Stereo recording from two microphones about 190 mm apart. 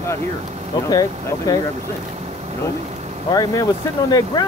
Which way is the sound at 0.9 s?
20° left (ahead or behind).